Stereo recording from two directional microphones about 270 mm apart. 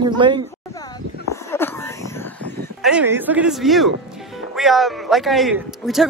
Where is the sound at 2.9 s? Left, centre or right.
Centre.